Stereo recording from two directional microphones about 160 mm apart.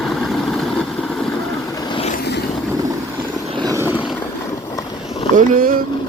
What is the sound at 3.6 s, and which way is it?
Vehicle, 20° right (ahead or behind).